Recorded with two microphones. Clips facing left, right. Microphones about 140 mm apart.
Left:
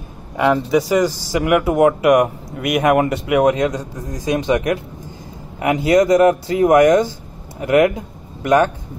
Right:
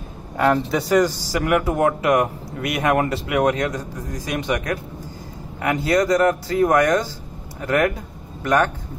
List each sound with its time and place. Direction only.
0.4 s speech: 5° left (ahead or behind)